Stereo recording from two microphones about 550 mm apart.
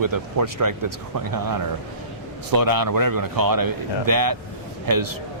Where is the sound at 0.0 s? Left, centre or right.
Right.